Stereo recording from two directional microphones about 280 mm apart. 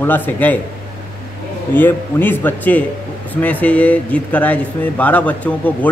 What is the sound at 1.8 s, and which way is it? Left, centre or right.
A man's voice, centre.